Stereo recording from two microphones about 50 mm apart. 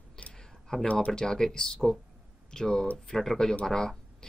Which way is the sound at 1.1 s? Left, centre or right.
Centre.